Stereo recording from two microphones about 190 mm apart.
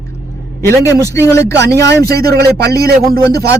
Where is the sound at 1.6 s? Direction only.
60° right (ahead or behind).